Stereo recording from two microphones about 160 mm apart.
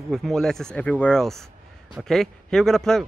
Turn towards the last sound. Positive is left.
turn(degrees=5)  # may be behind; listen again after turning